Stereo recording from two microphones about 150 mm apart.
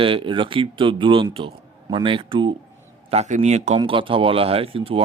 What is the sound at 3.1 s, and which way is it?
Speech, 45° right (ahead or behind).